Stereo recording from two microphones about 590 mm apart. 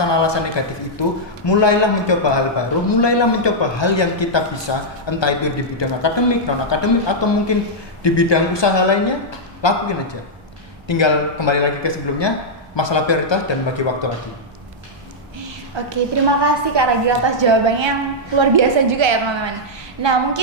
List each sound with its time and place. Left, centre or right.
0.0 s a man's voice: left
15.4 s a sound: right
16.4 s a woman's voice: right